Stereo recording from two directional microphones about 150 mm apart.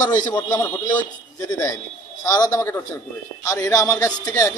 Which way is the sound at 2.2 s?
25° left (ahead or behind).